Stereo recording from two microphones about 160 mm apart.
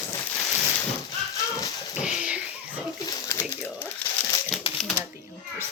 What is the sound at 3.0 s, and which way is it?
Speech, 15° left (ahead or behind).